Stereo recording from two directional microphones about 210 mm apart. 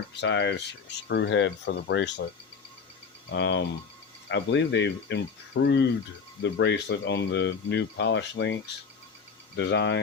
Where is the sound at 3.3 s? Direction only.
60° left (ahead or behind).